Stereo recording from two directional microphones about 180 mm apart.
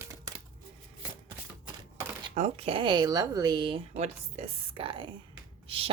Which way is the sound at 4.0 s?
35° right (ahead or behind).